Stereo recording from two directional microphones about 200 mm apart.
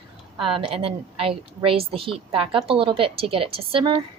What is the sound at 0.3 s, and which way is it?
A woman's voice, 25° right (ahead or behind).